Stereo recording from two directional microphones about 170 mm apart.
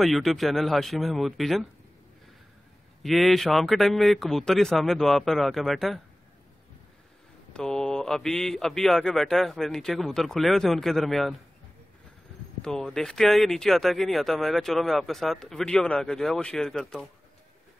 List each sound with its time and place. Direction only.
0.0 s speech: centre (ahead or behind)
3.0 s speech: centre (ahead or behind)
7.5 s speech: 5° left (ahead or behind)
12.6 s speech: 5° left (ahead or behind)